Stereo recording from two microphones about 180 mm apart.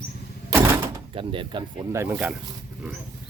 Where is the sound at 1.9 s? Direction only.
15° right (ahead or behind).